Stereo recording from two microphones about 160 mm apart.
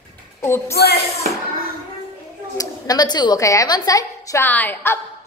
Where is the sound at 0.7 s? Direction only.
75° left (ahead or behind).